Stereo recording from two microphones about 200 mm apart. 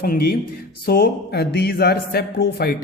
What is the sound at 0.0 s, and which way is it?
Speech, 50° left (ahead or behind).